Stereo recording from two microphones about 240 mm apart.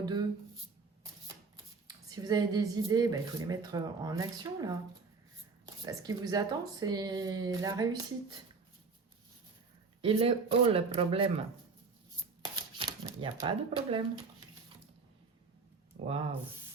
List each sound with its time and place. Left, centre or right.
0.0 s speech: centre
2.0 s speech: centre
10.0 s speech: right
12.7 s shuffling cards: right
13.4 s speech: right